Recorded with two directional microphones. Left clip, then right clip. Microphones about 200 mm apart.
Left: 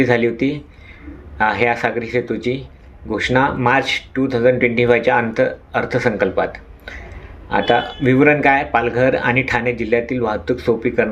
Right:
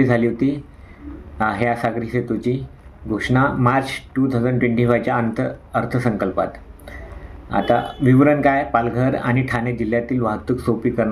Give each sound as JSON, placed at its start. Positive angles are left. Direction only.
{"t": 0.0, "sound": "speech", "side_deg": -20}